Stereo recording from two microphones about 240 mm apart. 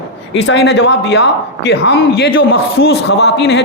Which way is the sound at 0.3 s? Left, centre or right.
Left.